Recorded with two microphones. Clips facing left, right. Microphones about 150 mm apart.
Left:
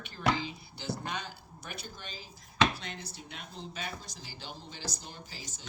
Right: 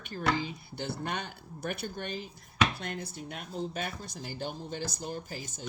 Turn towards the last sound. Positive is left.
turn(degrees=-50)  # may be behind; listen again after turning